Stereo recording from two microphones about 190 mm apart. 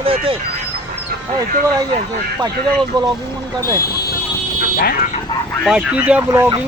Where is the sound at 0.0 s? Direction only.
30° right (ahead or behind).